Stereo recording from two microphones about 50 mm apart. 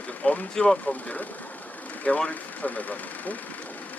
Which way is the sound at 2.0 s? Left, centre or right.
Left.